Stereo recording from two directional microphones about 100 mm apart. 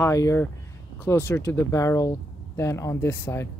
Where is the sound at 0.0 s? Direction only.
30° left (ahead or behind).